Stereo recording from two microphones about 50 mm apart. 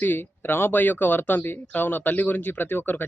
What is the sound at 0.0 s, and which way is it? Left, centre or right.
Speech, left.